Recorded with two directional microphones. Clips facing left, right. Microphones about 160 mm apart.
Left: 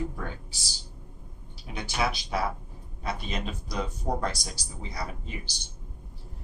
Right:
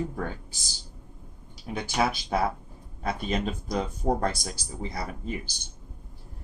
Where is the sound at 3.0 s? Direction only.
50° right (ahead or behind).